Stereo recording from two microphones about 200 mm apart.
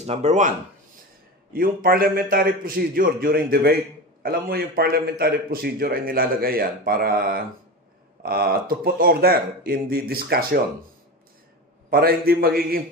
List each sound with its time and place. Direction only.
0.0 s speech: 35° right (ahead or behind)
1.5 s a man's voice: 45° right (ahead or behind)
11.9 s a man's voice: 50° right (ahead or behind)